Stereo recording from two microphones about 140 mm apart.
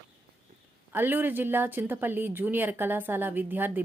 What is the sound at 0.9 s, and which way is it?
A woman's voice, 15° right (ahead or behind).